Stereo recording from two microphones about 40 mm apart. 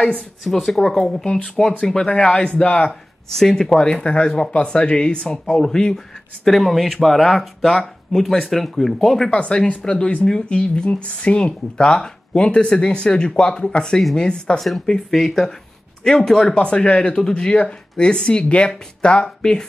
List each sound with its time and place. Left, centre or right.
0.4 s speech: centre
1.2 s speech: left
3.3 s speech: centre
3.8 s speech: left
5.5 s speech: centre
6.4 s speech: centre
9.3 s speech: left; by 16.5 s centre
16.5 s speech: left